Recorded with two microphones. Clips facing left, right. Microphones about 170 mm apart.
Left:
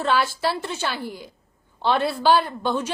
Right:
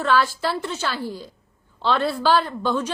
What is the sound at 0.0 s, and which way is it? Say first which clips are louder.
A woman's voice: right 1 dB; 25° left (ahead or behind).